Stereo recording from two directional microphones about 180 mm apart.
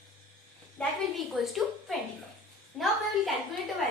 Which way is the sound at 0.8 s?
5° left (ahead or behind).